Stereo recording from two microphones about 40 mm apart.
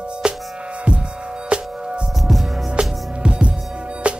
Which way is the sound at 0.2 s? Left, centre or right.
Right.